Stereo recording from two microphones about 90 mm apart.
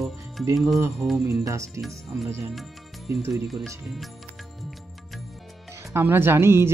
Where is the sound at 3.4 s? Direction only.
Centre (ahead or behind).